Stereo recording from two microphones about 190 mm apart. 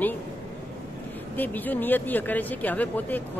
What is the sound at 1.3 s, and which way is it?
Speech, 10° left (ahead or behind).